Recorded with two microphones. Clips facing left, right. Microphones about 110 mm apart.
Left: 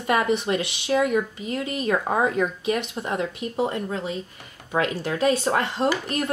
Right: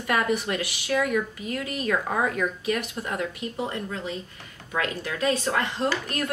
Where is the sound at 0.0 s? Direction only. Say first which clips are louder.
Left 3 dB; 25° left (ahead or behind).